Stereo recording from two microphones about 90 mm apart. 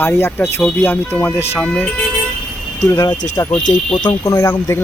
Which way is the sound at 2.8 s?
35° left (ahead or behind).